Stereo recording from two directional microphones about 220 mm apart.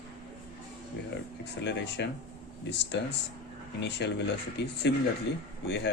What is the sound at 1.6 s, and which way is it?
Speech, 50° left (ahead or behind).